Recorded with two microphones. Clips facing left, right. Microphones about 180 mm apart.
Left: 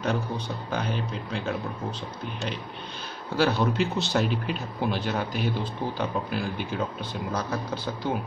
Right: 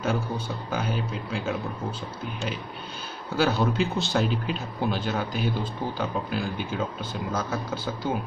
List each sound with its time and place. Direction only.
0.7 s speech: 5° right (ahead or behind)
3.3 s speech: centre (ahead or behind)